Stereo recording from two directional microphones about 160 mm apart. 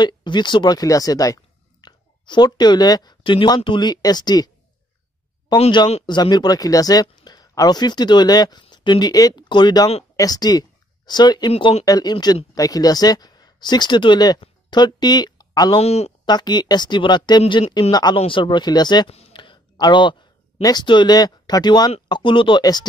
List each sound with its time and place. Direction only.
0.0 s speech: 30° left (ahead or behind)
5.6 s a man's voice: 35° left (ahead or behind)
11.5 s a man's voice: 40° left (ahead or behind)
11.8 s speech: 25° left (ahead or behind)
15.8 s a man's voice: 40° left (ahead or behind)
16.3 s speech: 25° left (ahead or behind)
19.0 s a sound: 35° left (ahead or behind)
20.6 s speech: 25° left (ahead or behind)